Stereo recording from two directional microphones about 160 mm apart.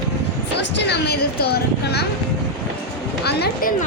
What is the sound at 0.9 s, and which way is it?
Speech, 85° left.